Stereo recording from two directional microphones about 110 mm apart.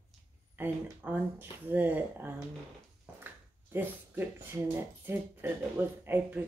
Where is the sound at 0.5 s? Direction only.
20° right (ahead or behind).